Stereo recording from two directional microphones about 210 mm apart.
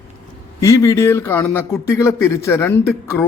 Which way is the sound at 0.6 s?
15° left (ahead or behind).